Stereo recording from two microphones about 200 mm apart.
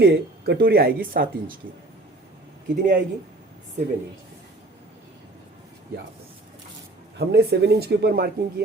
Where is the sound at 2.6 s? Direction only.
45° right (ahead or behind).